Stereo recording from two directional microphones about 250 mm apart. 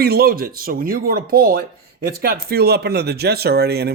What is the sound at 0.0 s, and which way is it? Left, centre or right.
Speech, right.